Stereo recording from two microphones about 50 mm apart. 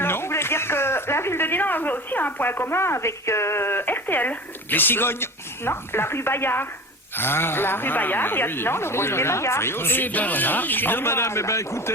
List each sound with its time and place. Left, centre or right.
0.0 s speech: left